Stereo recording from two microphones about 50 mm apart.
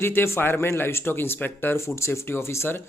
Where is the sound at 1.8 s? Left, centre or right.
Left.